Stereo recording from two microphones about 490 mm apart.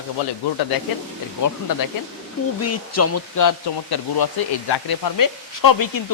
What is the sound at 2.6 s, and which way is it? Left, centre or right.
Speech, left.